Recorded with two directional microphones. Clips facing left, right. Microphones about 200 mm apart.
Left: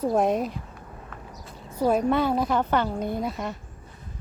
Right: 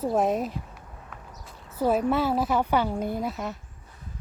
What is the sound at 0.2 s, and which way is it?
Speech, centre (ahead or behind).